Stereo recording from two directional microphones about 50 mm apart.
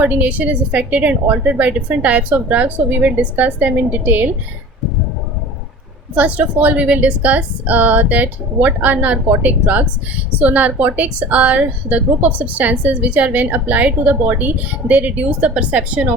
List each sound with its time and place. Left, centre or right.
0.0 s a woman's voice: right
6.1 s a woman's voice: right